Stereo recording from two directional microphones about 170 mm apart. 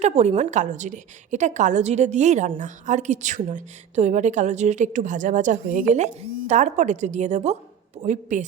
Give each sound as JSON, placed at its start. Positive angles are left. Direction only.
{"t": 0.0, "sound": "a woman's voice", "side_deg": -40}